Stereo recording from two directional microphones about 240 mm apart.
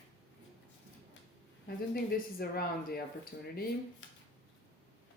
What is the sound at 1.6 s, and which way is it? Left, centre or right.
Speech, left.